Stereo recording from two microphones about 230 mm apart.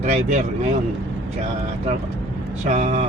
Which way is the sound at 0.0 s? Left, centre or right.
Right.